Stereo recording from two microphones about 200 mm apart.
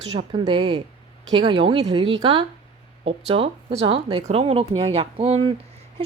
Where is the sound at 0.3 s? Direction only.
25° right (ahead or behind).